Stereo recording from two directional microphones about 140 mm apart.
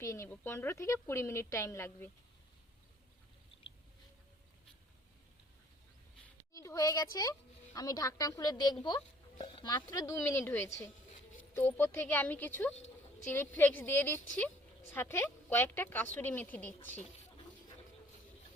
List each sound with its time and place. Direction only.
0.0 s speech: 20° left (ahead or behind)
6.5 s a woman's voice: 25° left (ahead or behind)